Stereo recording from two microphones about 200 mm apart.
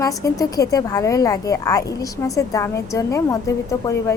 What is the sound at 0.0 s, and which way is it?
Speech, 15° left (ahead or behind).